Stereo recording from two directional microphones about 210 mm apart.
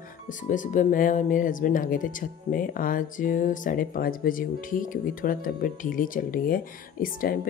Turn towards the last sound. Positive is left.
turn(degrees=45)  # may be behind; listen again after turning